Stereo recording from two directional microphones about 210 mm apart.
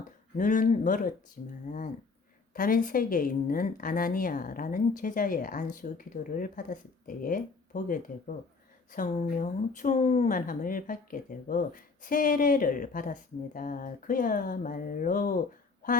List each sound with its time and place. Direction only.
0.3 s speech: 35° left (ahead or behind)